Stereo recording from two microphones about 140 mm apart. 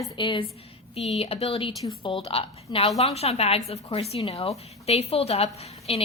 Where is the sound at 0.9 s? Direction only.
45° left (ahead or behind).